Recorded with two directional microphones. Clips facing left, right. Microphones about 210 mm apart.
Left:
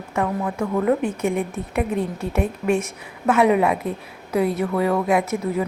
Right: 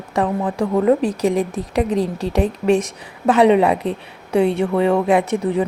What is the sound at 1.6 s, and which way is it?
Speech, 90° right.